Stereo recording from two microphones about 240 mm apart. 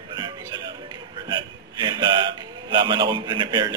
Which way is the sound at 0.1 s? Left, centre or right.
Centre.